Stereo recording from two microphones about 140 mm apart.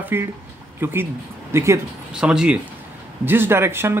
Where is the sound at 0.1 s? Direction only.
15° right (ahead or behind).